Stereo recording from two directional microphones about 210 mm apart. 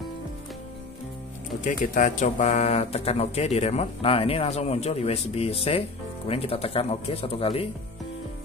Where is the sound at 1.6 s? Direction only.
40° left (ahead or behind).